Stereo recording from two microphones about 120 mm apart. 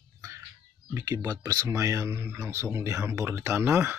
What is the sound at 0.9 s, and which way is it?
Speech, 30° right (ahead or behind).